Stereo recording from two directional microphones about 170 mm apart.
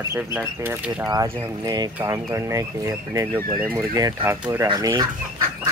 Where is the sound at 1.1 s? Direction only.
20° right (ahead or behind).